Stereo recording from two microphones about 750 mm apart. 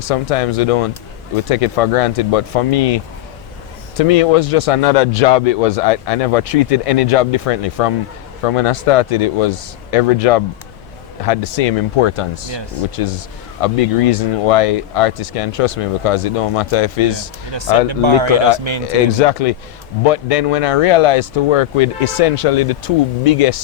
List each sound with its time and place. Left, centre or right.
0.1 s a man's voice: left
12.5 s speech: right
13.6 s a man's voice: left
17.5 s speech: right
19.2 s a man's voice: left